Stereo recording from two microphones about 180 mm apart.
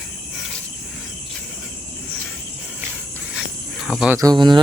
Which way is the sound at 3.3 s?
Centre (ahead or behind).